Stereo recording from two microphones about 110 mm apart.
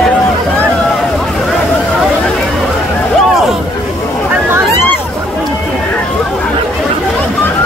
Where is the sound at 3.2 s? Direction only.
Centre (ahead or behind).